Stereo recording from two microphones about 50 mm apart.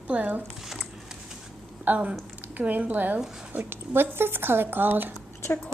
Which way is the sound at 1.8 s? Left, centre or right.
Right.